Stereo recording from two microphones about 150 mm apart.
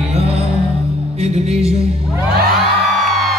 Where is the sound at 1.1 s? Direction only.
45° right (ahead or behind).